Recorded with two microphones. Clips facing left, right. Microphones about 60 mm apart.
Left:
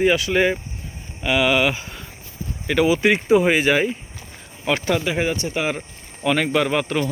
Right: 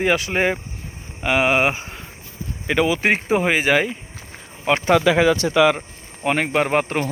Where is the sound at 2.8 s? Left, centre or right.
Right.